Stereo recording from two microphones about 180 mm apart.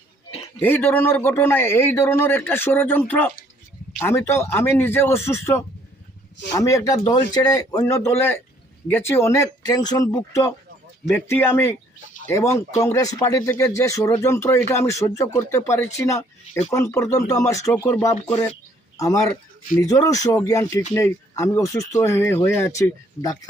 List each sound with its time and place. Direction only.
0.6 s a man's voice: 10° left (ahead or behind)